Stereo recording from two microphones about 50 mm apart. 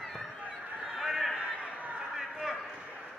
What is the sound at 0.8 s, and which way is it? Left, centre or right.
Fowl, centre.